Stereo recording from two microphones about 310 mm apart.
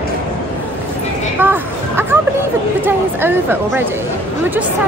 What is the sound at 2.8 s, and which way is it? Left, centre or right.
Speech, centre.